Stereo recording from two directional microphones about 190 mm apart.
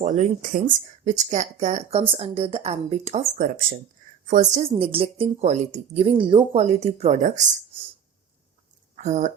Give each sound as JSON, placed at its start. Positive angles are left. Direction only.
{"t": 0.0, "sound": "speech", "side_deg": -40}
{"t": 4.7, "sound": "speech", "side_deg": -30}
{"t": 9.0, "sound": "speech", "side_deg": -40}